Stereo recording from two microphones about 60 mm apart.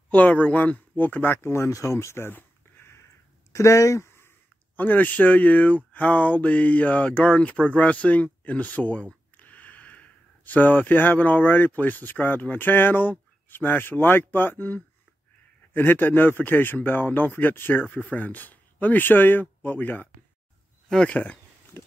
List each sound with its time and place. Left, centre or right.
0.1 s speech: left
1.7 s a sound: left
3.5 s speech: left
4.7 s speech: left
20.9 s speech: centre
21.7 s a sound: left